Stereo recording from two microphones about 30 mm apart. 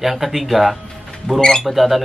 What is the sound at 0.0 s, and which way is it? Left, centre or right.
Speech, centre.